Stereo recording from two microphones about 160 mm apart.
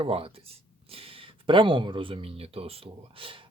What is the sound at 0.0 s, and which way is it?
Speech, 35° right (ahead or behind).